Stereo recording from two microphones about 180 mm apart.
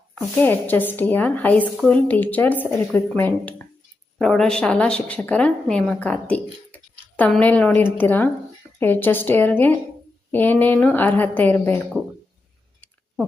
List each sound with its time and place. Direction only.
0.3 s a woman's voice: 10° left (ahead or behind)